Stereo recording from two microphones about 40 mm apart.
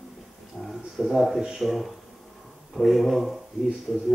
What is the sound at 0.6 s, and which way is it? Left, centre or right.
Speech, centre.